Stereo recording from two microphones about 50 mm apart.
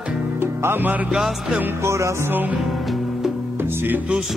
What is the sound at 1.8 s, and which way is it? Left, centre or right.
Music, right.